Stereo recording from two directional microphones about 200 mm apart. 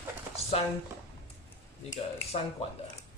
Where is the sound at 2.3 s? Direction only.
30° left (ahead or behind).